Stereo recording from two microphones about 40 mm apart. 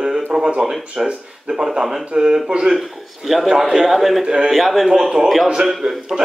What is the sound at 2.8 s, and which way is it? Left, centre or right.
A man's voice, centre.